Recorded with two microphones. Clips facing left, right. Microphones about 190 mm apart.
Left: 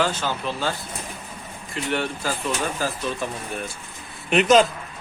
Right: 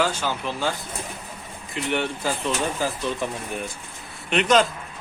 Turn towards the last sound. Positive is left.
turn(degrees=5)  # may be behind; listen again after turning